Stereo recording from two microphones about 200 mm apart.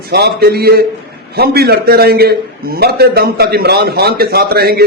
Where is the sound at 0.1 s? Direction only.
55° right (ahead or behind).